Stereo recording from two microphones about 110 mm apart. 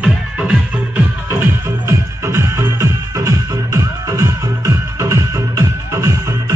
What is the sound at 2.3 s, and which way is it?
Music, 25° right (ahead or behind).